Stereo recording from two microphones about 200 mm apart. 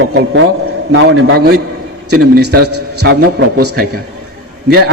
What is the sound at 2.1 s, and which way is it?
A man's voice, 55° right (ahead or behind).